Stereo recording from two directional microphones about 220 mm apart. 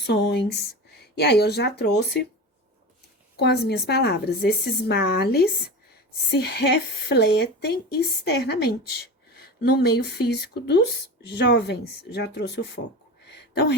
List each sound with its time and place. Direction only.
0.0 s speech: 50° left (ahead or behind)
3.3 s speech: 50° left (ahead or behind)
13.2 s a sound: 50° left (ahead or behind)